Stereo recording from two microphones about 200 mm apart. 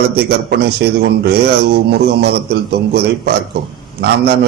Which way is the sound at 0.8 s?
55° right (ahead or behind).